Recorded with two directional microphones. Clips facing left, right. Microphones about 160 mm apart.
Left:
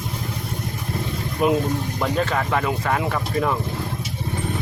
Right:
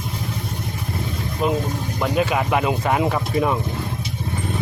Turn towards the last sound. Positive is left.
turn(degrees=-15)  # may be behind; listen again after turning